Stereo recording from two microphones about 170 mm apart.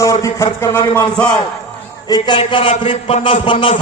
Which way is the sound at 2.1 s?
25° left (ahead or behind).